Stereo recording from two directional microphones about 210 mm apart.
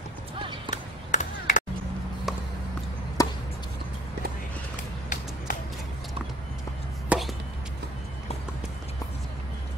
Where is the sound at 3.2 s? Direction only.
15° left (ahead or behind).